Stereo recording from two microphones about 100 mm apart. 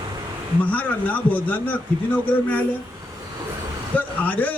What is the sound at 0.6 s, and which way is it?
A man's voice, 15° left (ahead or behind).